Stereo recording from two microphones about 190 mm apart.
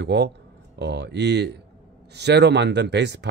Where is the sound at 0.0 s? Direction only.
65° right (ahead or behind).